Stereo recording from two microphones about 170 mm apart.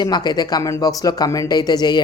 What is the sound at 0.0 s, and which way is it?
Speech, 25° left (ahead or behind).